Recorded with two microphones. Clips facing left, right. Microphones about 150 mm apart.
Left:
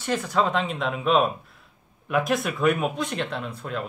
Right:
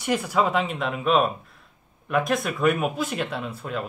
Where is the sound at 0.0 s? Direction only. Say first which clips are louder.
Right 1 dB; 10° right (ahead or behind).